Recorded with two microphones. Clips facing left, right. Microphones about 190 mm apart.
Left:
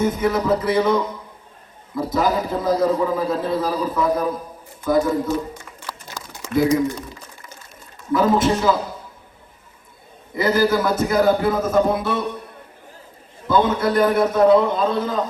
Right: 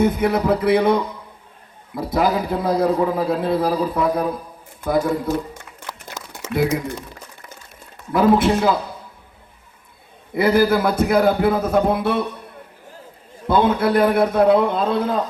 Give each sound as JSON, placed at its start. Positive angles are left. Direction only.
{"t": 0.0, "sound": "a man's voice", "side_deg": -60}
{"t": 2.0, "sound": "a man's voice", "side_deg": -60}
{"t": 5.8, "sound": "a sound", "side_deg": -20}
{"t": 8.1, "sound": "a man's voice", "side_deg": -60}
{"t": 10.3, "sound": "a man's voice", "side_deg": -60}
{"t": 13.5, "sound": "a man's voice", "side_deg": -60}